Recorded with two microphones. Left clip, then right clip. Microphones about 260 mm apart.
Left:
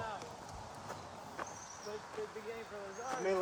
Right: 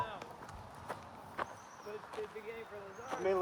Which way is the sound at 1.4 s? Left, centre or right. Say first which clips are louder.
Right 4 dB; right.